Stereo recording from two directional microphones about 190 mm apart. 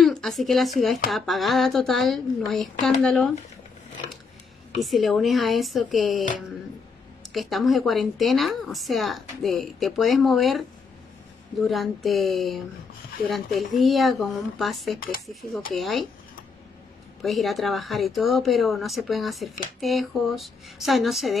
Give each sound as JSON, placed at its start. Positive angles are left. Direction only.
{"t": 0.0, "sound": "a woman's voice", "side_deg": 0}
{"t": 4.7, "sound": "a woman's voice", "side_deg": 0}
{"t": 7.3, "sound": "a woman's voice", "side_deg": 0}
{"t": 11.6, "sound": "a woman's voice", "side_deg": 0}
{"t": 15.0, "sound": "speech", "side_deg": 50}
{"t": 15.7, "sound": "a woman's voice", "side_deg": 0}
{"t": 17.2, "sound": "a woman's voice", "side_deg": 0}